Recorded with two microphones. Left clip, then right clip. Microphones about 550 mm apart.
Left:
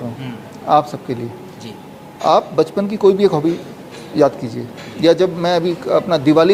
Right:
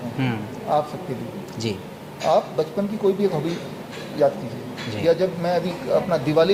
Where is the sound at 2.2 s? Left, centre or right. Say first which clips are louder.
Left 6 dB; left.